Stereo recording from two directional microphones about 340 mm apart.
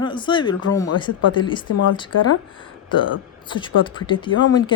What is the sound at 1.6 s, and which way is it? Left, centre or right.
Speech, left.